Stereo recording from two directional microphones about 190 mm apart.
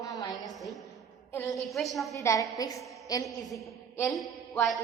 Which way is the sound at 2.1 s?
15° left (ahead or behind).